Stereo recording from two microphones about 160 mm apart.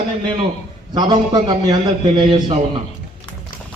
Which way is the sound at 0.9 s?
25° right (ahead or behind).